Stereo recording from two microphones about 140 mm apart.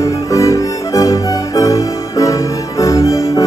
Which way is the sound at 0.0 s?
25° left (ahead or behind).